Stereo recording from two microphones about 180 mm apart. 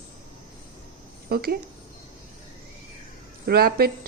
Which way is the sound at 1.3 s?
60° right (ahead or behind).